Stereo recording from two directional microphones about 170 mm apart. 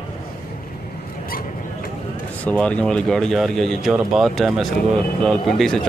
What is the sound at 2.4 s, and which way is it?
Speech, 10° left (ahead or behind).